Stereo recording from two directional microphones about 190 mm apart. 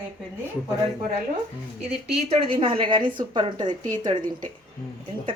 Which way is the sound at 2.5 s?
25° right (ahead or behind).